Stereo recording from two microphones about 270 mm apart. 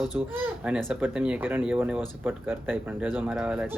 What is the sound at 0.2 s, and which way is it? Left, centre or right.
Speech, centre.